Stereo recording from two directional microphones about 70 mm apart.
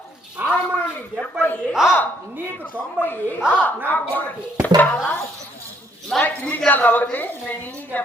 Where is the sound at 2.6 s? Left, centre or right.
Left.